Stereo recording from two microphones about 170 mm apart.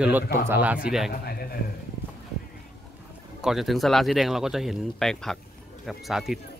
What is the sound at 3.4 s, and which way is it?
Speech, centre (ahead or behind).